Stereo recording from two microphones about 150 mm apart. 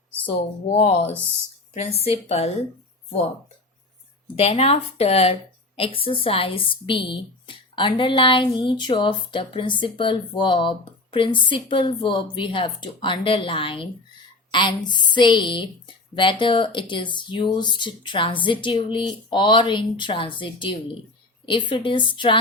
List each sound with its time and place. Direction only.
0.3 s a woman's voice: 45° left (ahead or behind)
4.4 s a woman's voice: 40° left (ahead or behind)